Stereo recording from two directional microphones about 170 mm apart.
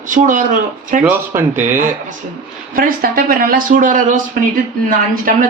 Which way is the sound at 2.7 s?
55° right (ahead or behind).